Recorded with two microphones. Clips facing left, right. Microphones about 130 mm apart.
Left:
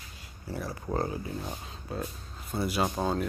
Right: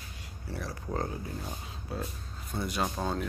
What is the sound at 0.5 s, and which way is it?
Speech, 5° left (ahead or behind).